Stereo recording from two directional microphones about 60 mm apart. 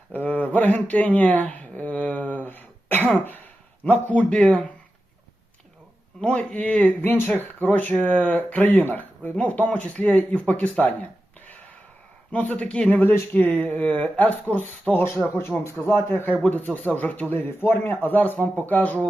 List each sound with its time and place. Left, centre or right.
0.1 s a sound: left
3.2 s speech: left
6.2 s speech: left
12.3 s speech: left
13.3 s speech: left
15.0 s a man's voice: left
16.4 s speech: left